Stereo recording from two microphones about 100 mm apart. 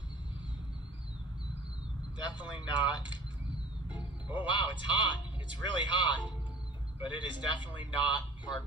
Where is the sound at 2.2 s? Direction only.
50° left (ahead or behind).